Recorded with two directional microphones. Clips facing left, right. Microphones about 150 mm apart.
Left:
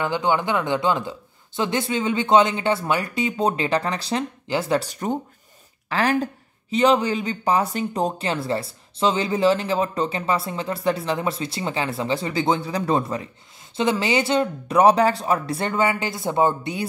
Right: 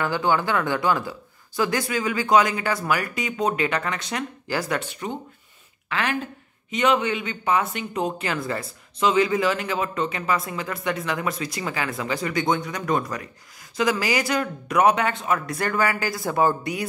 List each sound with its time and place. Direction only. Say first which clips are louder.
0.0 s speech: left 1 dB; 20° left (ahead or behind)